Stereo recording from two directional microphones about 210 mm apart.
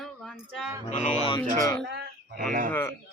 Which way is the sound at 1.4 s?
15° left (ahead or behind).